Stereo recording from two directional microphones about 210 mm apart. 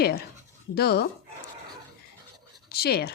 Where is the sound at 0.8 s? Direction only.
50° left (ahead or behind).